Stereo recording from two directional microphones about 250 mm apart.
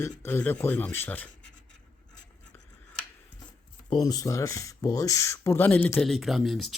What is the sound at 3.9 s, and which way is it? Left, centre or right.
Speech, centre.